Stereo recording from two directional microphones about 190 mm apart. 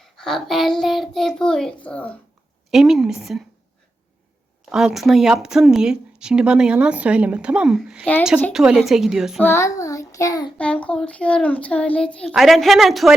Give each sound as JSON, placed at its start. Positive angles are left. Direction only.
{"t": 0.0, "sound": "a child's voice", "side_deg": 0}
{"t": 4.7, "sound": "speech", "side_deg": -5}
{"t": 9.4, "sound": "child singing", "side_deg": 15}
{"t": 10.6, "sound": "speech", "side_deg": 5}